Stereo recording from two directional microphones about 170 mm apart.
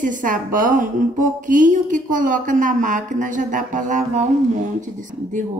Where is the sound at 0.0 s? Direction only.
50° right (ahead or behind).